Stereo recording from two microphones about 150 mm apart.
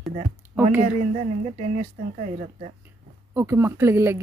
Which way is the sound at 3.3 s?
15° right (ahead or behind).